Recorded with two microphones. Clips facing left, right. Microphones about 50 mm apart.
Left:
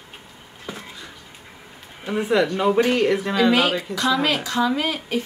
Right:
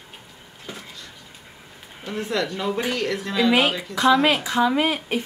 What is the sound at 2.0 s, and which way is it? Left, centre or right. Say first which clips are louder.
Speech: left 6 dB; centre.